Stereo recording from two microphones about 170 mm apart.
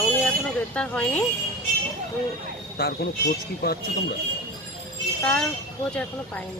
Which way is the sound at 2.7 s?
65° left (ahead or behind).